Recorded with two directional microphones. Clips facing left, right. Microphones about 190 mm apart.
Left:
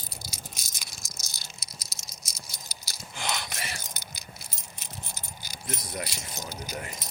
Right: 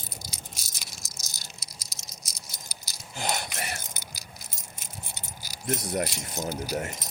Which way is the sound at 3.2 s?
45° right (ahead or behind).